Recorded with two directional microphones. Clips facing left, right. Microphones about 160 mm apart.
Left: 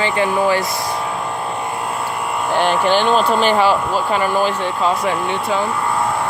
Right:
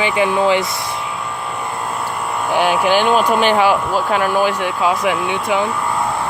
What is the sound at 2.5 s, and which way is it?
Speech, 10° right (ahead or behind).